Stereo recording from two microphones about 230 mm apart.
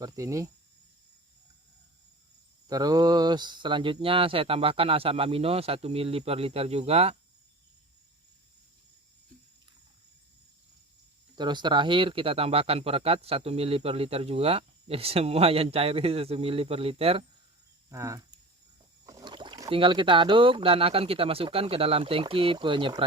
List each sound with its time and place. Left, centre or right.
0.0 s speech: centre
2.6 s speech: centre
11.3 s speech: centre
17.8 s speech: centre